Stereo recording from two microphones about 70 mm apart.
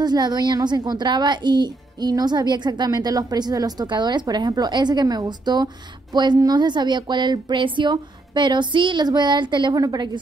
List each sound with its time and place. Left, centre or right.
0.0 s a woman's voice: right
4.5 s a woman's voice: right